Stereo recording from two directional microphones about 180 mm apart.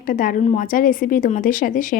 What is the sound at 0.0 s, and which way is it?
Speech, 50° left (ahead or behind).